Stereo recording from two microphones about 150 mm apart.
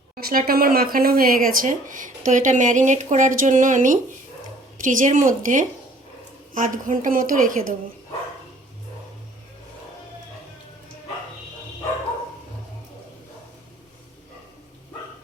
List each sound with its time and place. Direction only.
0.2 s speech: 85° right; by 7.7 s 65° right (ahead or behind)